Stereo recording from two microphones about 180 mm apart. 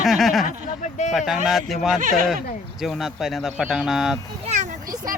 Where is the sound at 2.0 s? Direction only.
50° right (ahead or behind).